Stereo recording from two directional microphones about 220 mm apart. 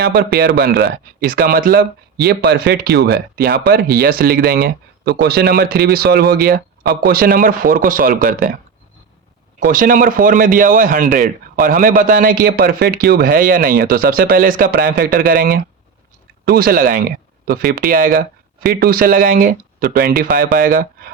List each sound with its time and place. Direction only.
0.0 s speech: 45° right (ahead or behind)
9.7 s speech: 40° right (ahead or behind)